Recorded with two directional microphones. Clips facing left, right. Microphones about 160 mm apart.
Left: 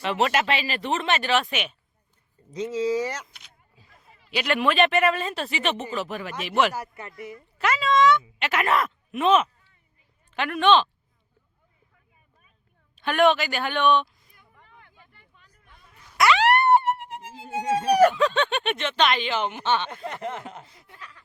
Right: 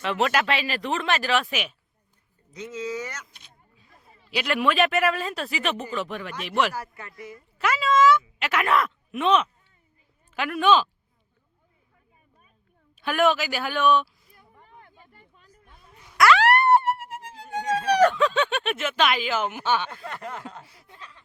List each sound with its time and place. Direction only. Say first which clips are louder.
0.0 s speech: even; centre (ahead or behind)
2.5 s speech: left 7 dB; 30° left (ahead or behind)
4.3 s speech: even; centre (ahead or behind)
6.7 s snicker: left 1 dB; 20° left (ahead or behind)
7.6 s speech: even; centre (ahead or behind)
13.0 s speech: left 2 dB; 5° right (ahead or behind)
14.3 s a sound: right 3 dB; 35° right (ahead or behind)
15.7 s music: right 1 dB; centre (ahead or behind)
19.9 s snicker: left 3 dB; 20° left (ahead or behind)